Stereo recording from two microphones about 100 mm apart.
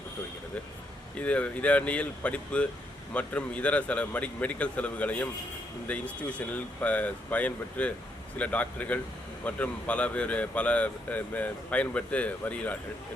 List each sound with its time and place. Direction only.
1.1 s speech: 15° left (ahead or behind)